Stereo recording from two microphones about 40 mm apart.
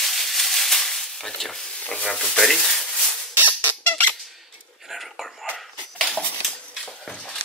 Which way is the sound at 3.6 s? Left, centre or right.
Left.